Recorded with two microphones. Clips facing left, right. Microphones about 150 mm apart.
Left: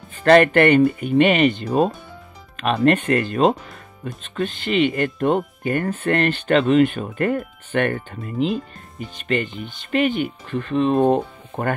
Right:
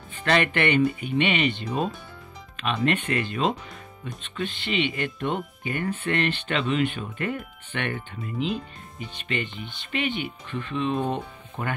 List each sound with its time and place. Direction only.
0.1 s speech: 45° left (ahead or behind)